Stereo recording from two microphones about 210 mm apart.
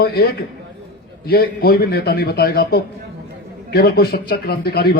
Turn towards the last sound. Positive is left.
turn(degrees=45)  # may be behind; listen again after turning